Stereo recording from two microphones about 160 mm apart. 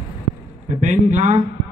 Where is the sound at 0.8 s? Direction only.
45° right (ahead or behind).